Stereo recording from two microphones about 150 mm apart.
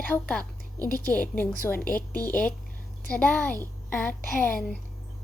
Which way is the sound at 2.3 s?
10° left (ahead or behind).